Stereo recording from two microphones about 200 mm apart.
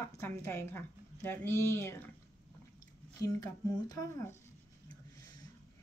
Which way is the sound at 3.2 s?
20° left (ahead or behind).